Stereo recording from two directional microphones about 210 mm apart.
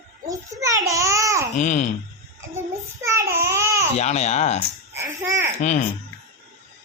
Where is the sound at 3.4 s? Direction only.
15° right (ahead or behind).